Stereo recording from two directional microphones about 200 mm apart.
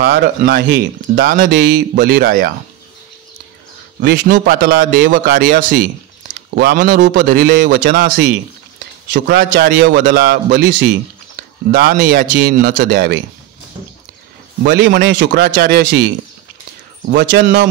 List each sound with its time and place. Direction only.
0.4 s a man's voice: 55° right (ahead or behind)
4.0 s a man's voice: 50° right (ahead or behind)
14.6 s a man's voice: 55° right (ahead or behind)
15.4 s a man's voice: 50° right (ahead or behind)
17.1 s a man's voice: 60° right (ahead or behind)